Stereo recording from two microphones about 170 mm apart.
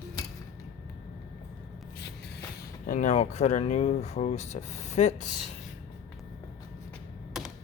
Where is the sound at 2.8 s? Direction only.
50° left (ahead or behind).